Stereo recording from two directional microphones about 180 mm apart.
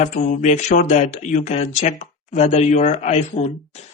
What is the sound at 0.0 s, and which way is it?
Speech, 45° left (ahead or behind).